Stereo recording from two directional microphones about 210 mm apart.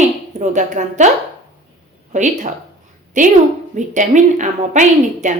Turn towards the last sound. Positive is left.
turn(degrees=-35)  # may be behind; listen again after turning